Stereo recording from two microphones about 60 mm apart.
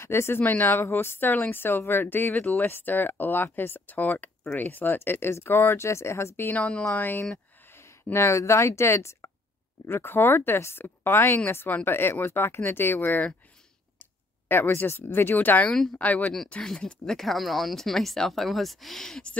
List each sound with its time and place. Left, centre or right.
0.0 s speech: left
0.4 s speech: left
6.5 s speech: left
7.0 s speech: left
7.7 s speech: left
9.8 s speech: left
14.5 s speech: left
16.6 s speech: centre